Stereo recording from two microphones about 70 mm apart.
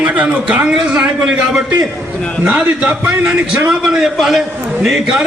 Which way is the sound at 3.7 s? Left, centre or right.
Centre.